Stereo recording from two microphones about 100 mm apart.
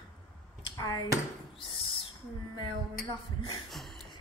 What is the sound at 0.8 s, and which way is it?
Speech, 40° left (ahead or behind).